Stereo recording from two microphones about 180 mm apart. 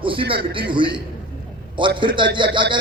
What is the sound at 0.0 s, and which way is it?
A man's voice, 30° right (ahead or behind).